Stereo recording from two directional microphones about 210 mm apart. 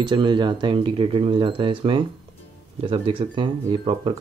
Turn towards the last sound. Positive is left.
turn(degrees=-25)  # may be behind; listen again after turning